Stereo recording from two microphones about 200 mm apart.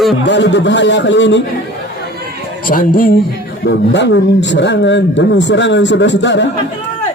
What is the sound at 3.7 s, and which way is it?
A man's voice, 60° left (ahead or behind).